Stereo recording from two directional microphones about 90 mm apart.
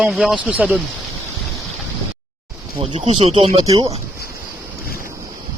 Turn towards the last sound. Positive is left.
turn(degrees=-40)  # may be behind; listen again after turning